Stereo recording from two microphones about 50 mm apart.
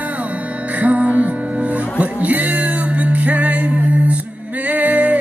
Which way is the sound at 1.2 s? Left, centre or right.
Centre.